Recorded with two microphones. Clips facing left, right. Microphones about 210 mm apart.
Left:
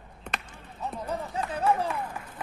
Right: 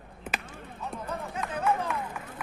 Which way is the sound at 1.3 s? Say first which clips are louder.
Left 2 dB; 35° left (ahead or behind).